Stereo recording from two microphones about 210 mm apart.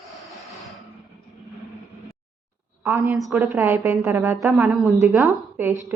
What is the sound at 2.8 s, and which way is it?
A woman's voice, 10° right (ahead or behind).